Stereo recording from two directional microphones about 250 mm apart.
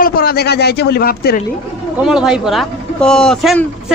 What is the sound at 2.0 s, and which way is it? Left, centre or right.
A woman's voice, centre.